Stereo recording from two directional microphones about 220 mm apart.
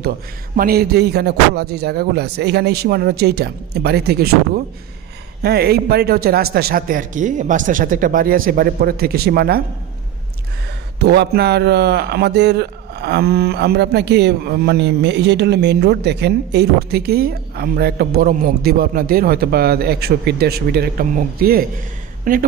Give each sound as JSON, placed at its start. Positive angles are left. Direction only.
{"t": 0.6, "sound": "speech", "side_deg": -45}
{"t": 5.4, "sound": "speech", "side_deg": -45}
{"t": 11.0, "sound": "speech", "side_deg": -50}